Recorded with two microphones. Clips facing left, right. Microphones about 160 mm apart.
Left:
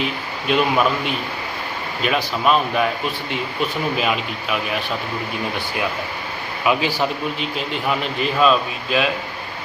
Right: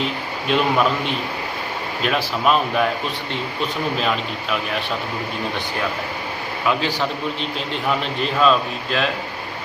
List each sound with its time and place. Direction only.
0.4 s speech: 5° left (ahead or behind)
3.9 s speech: 10° left (ahead or behind)
6.7 s speech: 15° left (ahead or behind)